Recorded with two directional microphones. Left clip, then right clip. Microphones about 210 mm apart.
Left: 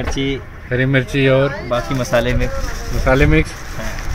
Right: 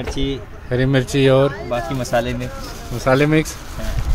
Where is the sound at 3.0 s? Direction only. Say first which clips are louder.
Left 1 dB; 10° right (ahead or behind).